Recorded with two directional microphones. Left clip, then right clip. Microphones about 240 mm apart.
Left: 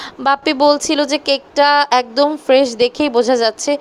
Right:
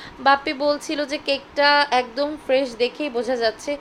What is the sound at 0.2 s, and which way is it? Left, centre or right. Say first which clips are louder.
A woman's voice: left 5 dB; left.